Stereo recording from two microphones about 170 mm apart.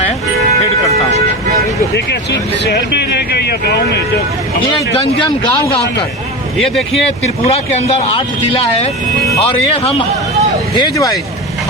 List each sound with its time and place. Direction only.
2.3 s speech: 75° left (ahead or behind)
7.4 s speech: 40° left (ahead or behind); by 11.2 s 20° left (ahead or behind)